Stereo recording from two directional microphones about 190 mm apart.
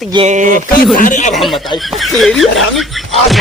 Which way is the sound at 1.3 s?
Centre (ahead or behind).